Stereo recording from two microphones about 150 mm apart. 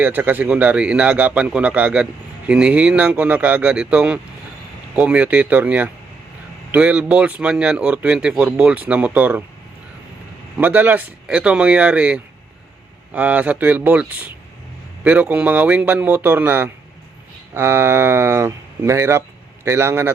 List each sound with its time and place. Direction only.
0.0 s speech: 10° right (ahead or behind)
10.6 s speech: 10° right (ahead or behind)